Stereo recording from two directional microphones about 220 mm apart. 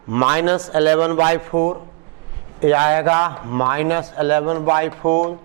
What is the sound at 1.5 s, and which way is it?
Speech, 30° right (ahead or behind).